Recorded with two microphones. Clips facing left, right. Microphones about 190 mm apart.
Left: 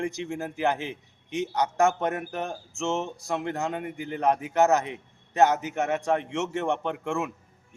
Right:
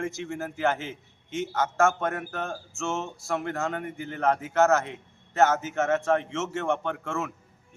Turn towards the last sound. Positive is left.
turn(degrees=15)  # may be behind; listen again after turning